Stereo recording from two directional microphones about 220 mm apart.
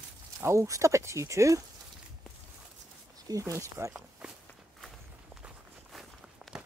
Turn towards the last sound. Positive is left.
turn(degrees=0)  # may be behind; listen again after turning